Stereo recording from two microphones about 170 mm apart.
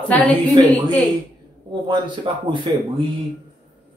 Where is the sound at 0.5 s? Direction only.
25° right (ahead or behind).